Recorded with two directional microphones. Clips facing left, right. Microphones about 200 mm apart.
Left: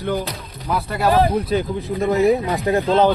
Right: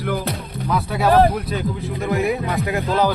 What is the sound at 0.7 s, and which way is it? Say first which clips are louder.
Speech: even; centre (ahead or behind).